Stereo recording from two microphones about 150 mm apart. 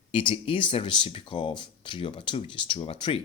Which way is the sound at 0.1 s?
35° left (ahead or behind).